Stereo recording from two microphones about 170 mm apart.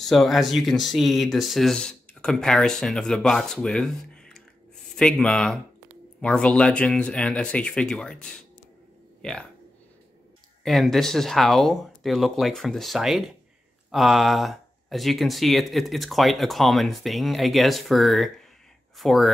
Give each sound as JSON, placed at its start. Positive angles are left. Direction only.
{"t": 0.0, "sound": "speech", "side_deg": 0}
{"t": 10.6, "sound": "speech", "side_deg": 0}